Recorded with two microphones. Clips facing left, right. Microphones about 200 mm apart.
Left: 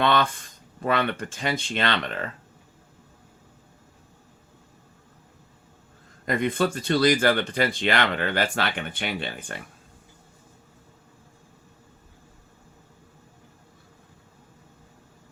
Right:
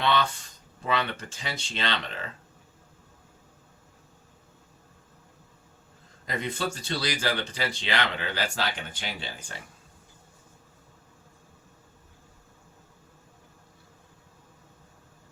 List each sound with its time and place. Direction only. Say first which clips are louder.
0.0 s a sound: left 4 dB; 55° left (ahead or behind)
0.8 s speech: left 5 dB; 55° left (ahead or behind)
6.2 s speech: left 7 dB; 55° left (ahead or behind)